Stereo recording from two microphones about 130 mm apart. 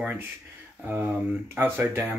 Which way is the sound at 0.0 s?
10° right (ahead or behind).